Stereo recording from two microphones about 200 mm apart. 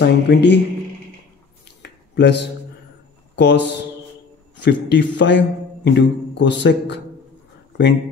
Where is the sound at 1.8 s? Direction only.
60° left (ahead or behind).